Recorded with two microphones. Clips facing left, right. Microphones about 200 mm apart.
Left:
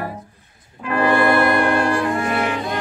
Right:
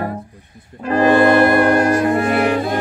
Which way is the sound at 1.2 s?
20° right (ahead or behind).